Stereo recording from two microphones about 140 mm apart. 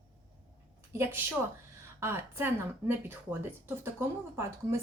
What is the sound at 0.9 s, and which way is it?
A woman's voice, 15° right (ahead or behind).